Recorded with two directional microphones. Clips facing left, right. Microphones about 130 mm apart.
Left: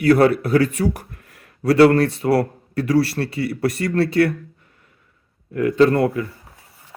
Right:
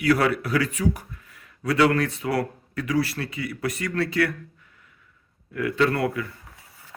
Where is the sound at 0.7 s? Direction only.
65° left (ahead or behind).